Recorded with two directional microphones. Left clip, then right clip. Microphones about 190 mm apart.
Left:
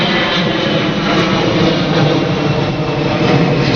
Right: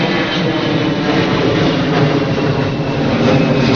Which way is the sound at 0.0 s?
35° right (ahead or behind).